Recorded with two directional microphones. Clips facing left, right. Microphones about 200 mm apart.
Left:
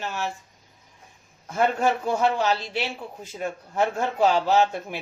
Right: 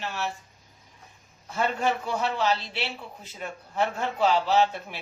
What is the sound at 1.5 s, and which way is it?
Speech, 45° left (ahead or behind).